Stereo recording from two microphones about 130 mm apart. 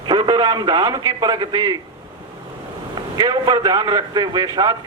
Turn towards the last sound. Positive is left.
turn(degrees=-30)  # may be behind; listen again after turning